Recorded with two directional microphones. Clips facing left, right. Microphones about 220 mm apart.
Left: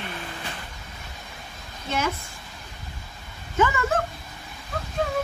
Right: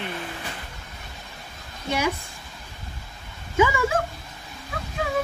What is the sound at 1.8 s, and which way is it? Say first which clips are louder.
Speech: right 2 dB; 10° right (ahead or behind).